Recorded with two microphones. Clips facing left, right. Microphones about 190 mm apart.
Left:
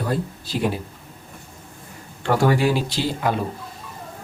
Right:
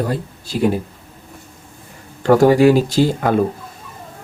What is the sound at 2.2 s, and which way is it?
Speech, 40° right (ahead or behind).